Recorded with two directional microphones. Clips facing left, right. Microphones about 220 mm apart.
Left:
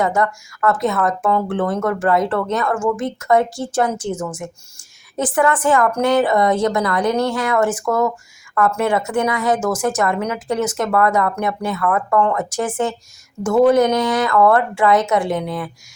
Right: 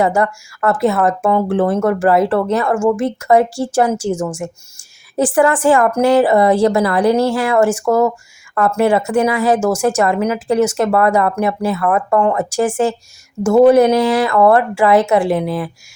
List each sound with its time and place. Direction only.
0.0 s a woman's voice: 30° right (ahead or behind)